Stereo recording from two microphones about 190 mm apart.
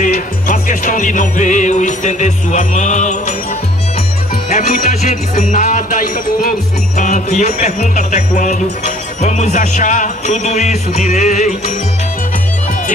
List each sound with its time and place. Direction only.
0.0 s music: 45° left (ahead or behind)
4.5 s music: 40° left (ahead or behind)